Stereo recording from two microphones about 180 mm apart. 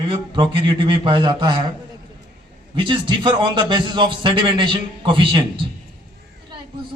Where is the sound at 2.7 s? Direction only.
25° right (ahead or behind).